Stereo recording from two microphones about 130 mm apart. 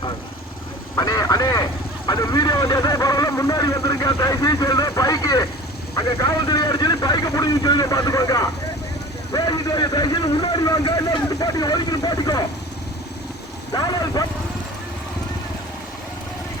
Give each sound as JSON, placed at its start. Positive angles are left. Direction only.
{"t": 0.9, "sound": "vehicle", "side_deg": 30}
{"t": 6.1, "sound": "speech", "side_deg": 30}
{"t": 13.7, "sound": "vehicle", "side_deg": 30}